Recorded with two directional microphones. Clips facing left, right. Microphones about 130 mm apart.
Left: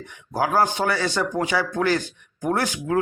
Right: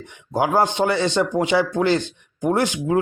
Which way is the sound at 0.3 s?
20° right (ahead or behind).